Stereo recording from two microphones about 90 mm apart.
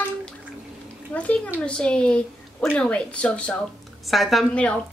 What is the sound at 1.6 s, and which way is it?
A woman's voice, 10° left (ahead or behind).